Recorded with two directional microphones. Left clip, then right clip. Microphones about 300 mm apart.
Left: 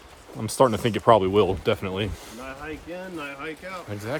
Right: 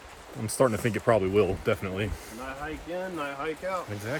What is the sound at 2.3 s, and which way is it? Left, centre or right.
Speech, centre.